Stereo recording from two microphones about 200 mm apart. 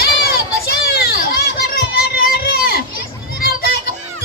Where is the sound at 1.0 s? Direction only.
45° left (ahead or behind).